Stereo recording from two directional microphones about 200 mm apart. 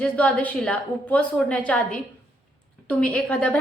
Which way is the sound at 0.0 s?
5° left (ahead or behind).